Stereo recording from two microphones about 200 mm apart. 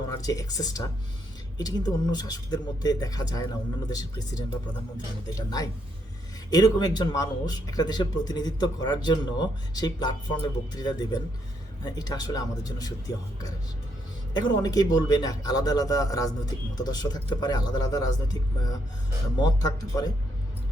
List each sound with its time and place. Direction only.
0.2 s a man's voice: 20° left (ahead or behind)
14.3 s a man's voice: 20° left (ahead or behind)